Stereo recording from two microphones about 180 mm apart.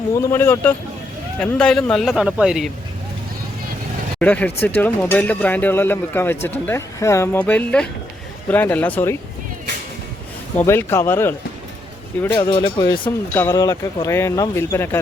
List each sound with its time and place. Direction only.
0.1 s a man's voice: 15° left (ahead or behind); by 2.6 s 5° right (ahead or behind)
4.2 s speech: 10° left (ahead or behind)
10.6 s speech: 10° left (ahead or behind)
12.4 s speech: 25° left (ahead or behind)